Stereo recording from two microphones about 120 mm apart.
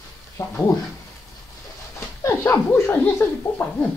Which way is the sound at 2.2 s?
25° left (ahead or behind).